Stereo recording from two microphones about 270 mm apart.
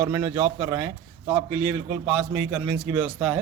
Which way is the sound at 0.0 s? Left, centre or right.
Centre.